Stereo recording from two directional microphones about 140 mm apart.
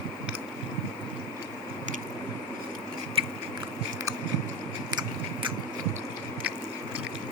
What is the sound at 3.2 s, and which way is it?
Biting, 40° right (ahead or behind).